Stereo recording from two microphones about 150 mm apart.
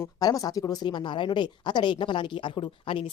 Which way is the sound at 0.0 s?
25° left (ahead or behind).